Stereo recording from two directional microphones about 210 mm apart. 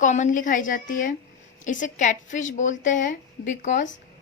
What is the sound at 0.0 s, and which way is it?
A woman's voice, 35° left (ahead or behind).